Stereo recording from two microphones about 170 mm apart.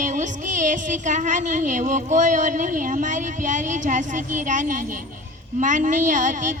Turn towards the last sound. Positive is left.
turn(degrees=-50)  # may be behind; listen again after turning